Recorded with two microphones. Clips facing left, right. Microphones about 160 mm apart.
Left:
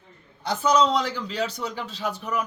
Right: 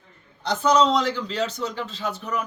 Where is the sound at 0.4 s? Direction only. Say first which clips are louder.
Right 2 dB; 10° left (ahead or behind).